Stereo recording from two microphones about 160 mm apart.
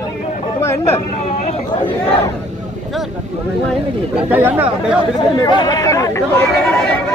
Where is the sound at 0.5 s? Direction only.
15° left (ahead or behind).